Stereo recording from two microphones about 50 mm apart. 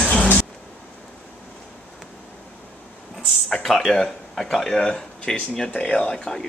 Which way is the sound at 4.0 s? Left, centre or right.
Centre.